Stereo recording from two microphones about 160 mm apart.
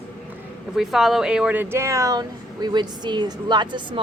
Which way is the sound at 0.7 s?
Centre (ahead or behind).